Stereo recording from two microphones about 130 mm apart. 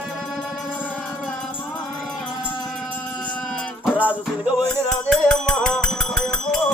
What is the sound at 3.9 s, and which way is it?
Music, 10° right (ahead or behind).